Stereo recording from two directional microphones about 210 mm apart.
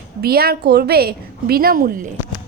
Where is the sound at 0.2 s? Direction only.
45° right (ahead or behind).